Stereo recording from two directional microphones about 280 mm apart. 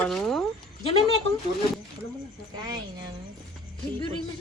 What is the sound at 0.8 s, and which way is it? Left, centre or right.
Speech, centre.